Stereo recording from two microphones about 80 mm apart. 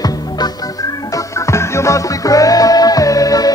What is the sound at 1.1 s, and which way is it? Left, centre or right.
Music, left.